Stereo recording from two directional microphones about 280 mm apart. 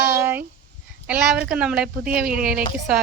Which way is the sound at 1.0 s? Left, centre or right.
Centre.